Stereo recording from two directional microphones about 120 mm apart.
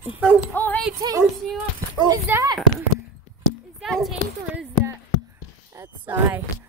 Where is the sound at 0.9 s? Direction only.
30° right (ahead or behind).